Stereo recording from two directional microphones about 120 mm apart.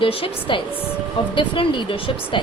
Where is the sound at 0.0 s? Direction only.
50° left (ahead or behind).